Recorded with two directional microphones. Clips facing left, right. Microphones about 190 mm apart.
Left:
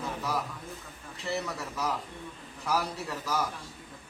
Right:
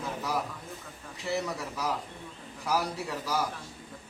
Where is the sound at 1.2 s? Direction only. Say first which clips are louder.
Right 2 dB; 10° right (ahead or behind).